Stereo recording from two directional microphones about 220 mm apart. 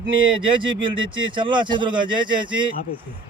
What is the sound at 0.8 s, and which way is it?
Speech, 20° right (ahead or behind).